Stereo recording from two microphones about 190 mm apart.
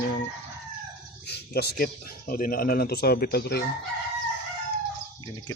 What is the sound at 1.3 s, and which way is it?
Speech, 55° left (ahead or behind).